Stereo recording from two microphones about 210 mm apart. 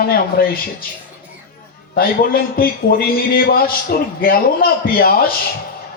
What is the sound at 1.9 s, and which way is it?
Speech, 45° left (ahead or behind).